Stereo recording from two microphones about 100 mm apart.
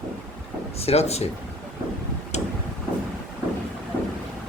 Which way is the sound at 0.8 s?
90° left.